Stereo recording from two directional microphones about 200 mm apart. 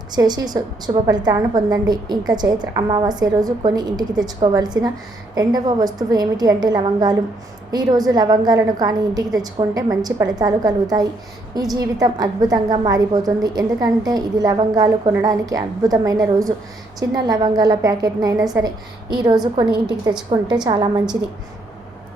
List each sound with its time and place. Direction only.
0.1 s a woman's voice: 20° right (ahead or behind)